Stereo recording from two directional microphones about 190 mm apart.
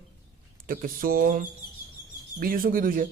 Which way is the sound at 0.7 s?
50° right (ahead or behind).